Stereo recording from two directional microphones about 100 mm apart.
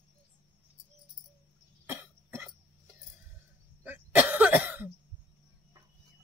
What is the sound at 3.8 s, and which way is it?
Cough, 15° right (ahead or behind).